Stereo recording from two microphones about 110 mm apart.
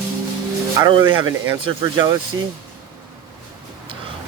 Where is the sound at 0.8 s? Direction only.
40° right (ahead or behind).